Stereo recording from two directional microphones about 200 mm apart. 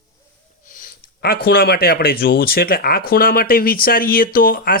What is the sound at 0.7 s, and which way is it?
Speech, 45° left (ahead or behind).